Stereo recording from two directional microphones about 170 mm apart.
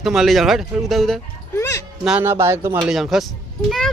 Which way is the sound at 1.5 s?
15° left (ahead or behind).